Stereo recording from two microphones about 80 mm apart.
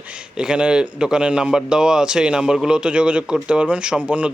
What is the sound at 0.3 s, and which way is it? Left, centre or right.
A man's voice, centre.